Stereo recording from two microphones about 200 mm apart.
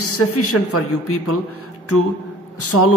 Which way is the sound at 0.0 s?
90° left.